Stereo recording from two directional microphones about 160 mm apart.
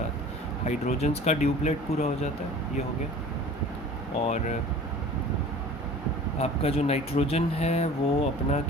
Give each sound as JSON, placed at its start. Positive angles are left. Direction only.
{"t": 0.6, "sound": "speech", "side_deg": 45}
{"t": 6.4, "sound": "speech", "side_deg": 40}